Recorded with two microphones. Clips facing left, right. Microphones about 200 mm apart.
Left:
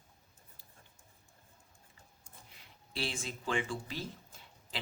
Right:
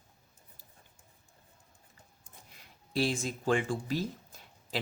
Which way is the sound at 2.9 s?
40° right (ahead or behind).